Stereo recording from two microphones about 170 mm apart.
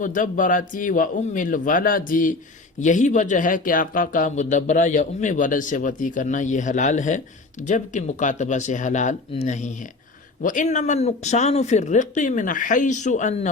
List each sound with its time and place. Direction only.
0.0 s speech: 50° left (ahead or behind)